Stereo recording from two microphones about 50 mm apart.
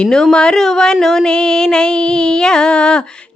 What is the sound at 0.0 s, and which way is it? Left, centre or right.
Speech, centre.